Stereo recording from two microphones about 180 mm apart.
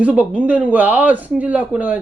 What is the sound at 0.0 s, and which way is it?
Speech, 5° right (ahead or behind).